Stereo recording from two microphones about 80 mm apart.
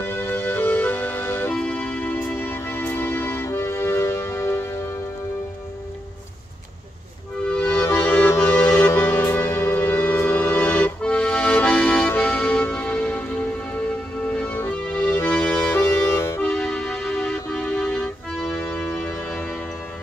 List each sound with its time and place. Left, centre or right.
0.0 s music: left
7.4 s music: centre
11.0 s accordion: centre
12.1 s music: centre
13.7 s tick-tock: centre
14.7 s music: centre
15.8 s music: left
16.5 s music: centre
18.5 s music: left